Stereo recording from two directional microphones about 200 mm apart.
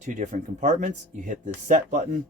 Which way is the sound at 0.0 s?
35° right (ahead or behind).